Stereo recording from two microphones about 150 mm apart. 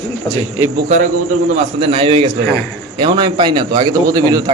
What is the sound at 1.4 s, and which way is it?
A man's voice, 45° right (ahead or behind).